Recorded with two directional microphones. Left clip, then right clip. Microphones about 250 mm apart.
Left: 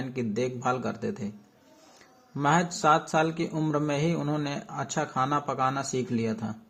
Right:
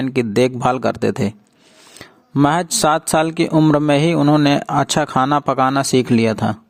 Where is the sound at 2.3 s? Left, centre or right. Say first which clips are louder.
Right 9 dB; right.